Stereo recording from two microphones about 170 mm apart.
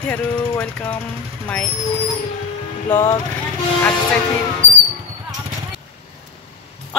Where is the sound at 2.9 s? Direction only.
15° left (ahead or behind).